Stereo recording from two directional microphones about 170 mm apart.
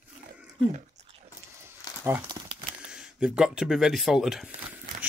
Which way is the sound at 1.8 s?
20° left (ahead or behind).